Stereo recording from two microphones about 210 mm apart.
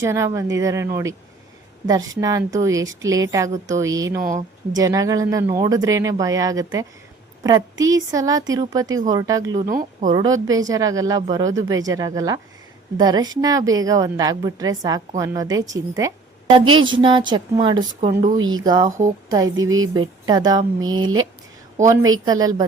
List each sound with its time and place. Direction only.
0.0 s speech: 15° right (ahead or behind)
9.6 s speech: 40° right (ahead or behind)
10.1 s a woman's voice: 15° right (ahead or behind)
18.6 s a woman's voice: 20° right (ahead or behind)
19.5 s speech: 70° right (ahead or behind)
19.9 s a woman's voice: 20° right (ahead or behind)